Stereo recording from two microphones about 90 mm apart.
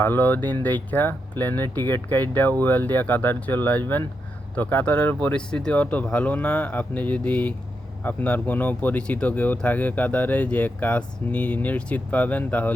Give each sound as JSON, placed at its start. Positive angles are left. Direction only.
{"t": 0.0, "sound": "speech", "side_deg": 20}